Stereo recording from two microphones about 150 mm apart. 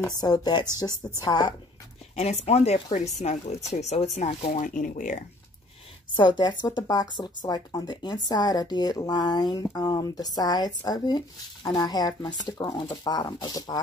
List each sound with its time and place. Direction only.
0.1 s speech: 25° left (ahead or behind)
2.1 s speech: 45° left (ahead or behind)
4.6 s speech: 60° left (ahead or behind)
6.1 s speech: 30° left (ahead or behind)